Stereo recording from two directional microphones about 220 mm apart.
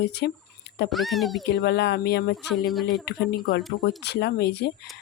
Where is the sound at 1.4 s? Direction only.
50° left (ahead or behind).